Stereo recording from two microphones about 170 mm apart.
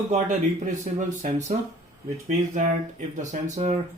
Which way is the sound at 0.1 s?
45° right (ahead or behind).